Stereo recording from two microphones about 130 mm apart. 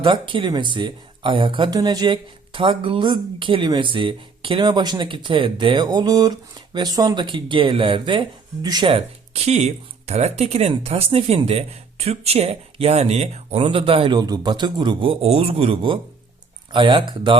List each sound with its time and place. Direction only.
0.0 s speech: 40° right (ahead or behind)